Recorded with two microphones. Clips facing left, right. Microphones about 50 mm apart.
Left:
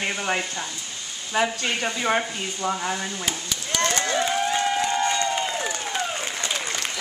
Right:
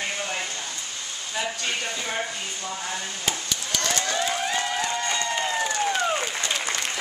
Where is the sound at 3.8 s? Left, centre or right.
Left.